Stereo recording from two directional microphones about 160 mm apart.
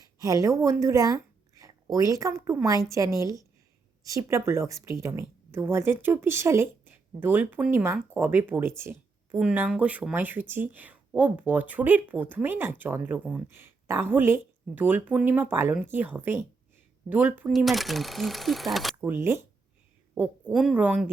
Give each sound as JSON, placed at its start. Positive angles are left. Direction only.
{"t": 0.2, "sound": "a woman's voice", "side_deg": -20}
{"t": 17.5, "sound": "speech", "side_deg": 0}
{"t": 19.0, "sound": "a woman's voice", "side_deg": -15}